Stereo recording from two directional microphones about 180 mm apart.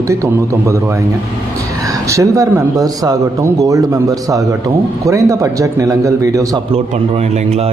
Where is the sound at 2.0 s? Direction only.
15° right (ahead or behind).